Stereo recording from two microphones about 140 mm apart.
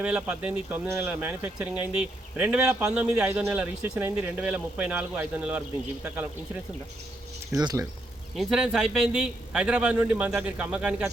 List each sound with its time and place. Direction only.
0.0 s a man's voice: 10° right (ahead or behind)
7.5 s speech: 25° right (ahead or behind)
8.4 s a man's voice: 5° right (ahead or behind)